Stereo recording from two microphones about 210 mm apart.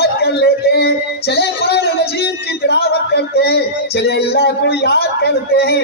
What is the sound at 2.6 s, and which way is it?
Music, 50° left (ahead or behind).